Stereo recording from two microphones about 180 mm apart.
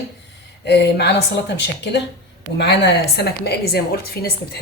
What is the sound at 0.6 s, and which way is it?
A woman's voice, 70° left (ahead or behind).